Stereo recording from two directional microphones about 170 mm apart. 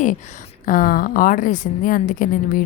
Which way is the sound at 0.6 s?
55° left (ahead or behind).